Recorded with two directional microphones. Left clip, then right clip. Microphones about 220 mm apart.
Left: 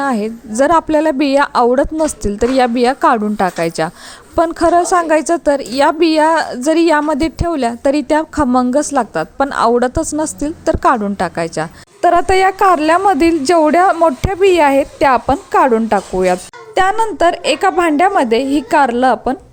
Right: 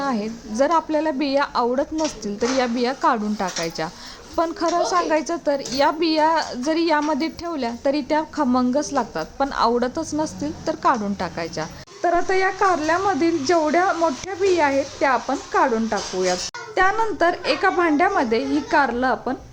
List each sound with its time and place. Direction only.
0.0 s a woman's voice: 30° left (ahead or behind)